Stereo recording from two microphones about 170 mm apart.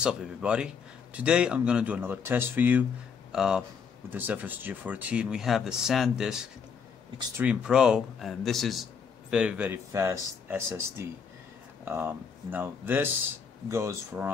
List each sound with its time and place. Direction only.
0.0 s speech: 5° right (ahead or behind)